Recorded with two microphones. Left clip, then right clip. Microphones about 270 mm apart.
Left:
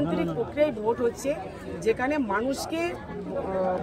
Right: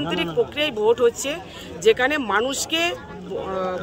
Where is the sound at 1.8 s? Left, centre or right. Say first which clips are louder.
Right 7 dB; centre.